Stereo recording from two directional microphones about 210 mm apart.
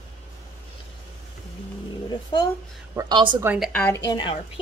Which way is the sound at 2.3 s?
20° left (ahead or behind).